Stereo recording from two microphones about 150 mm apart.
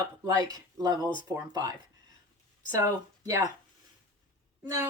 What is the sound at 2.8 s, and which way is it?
Speech, 25° right (ahead or behind).